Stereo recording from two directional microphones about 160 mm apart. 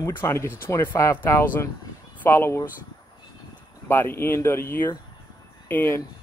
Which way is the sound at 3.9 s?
15° left (ahead or behind).